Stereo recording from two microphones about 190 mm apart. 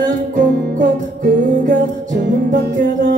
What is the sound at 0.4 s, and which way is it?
Music, 45° right (ahead or behind).